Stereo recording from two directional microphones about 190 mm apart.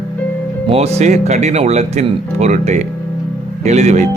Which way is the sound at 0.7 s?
35° right (ahead or behind).